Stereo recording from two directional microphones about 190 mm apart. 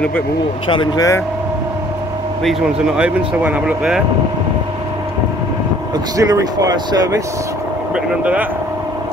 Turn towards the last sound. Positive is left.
turn(degrees=-20)  # may be behind; listen again after turning